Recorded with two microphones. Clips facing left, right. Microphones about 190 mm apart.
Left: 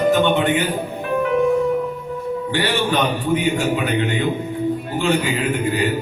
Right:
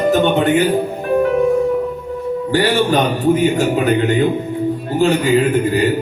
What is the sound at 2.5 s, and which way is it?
Speech, 40° right (ahead or behind).